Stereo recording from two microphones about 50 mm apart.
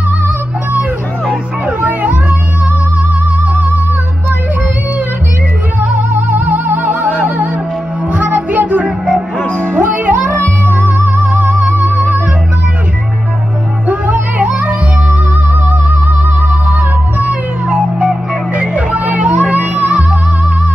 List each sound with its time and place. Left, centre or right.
1.8 s music: right
5.8 s music: right
13.8 s music: right
17.2 s music: right